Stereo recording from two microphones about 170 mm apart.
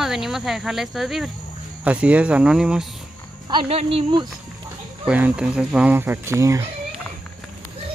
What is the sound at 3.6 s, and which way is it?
Speech, 35° right (ahead or behind).